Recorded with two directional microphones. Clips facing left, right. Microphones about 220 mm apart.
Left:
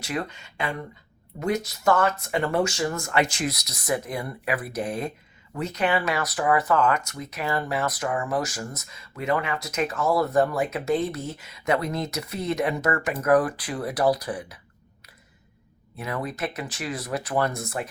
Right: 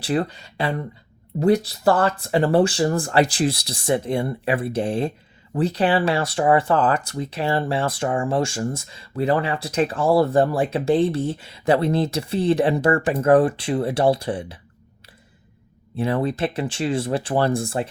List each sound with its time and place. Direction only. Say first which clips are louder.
0.0 s speech: right 7 dB; 35° right (ahead or behind)
16.0 s speech: right 8 dB; 30° right (ahead or behind)